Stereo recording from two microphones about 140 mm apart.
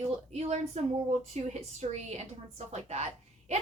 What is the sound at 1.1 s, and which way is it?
A woman's voice, 55° right (ahead or behind).